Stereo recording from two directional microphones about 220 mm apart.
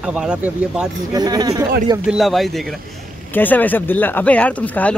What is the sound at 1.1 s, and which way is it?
Speech, 20° right (ahead or behind).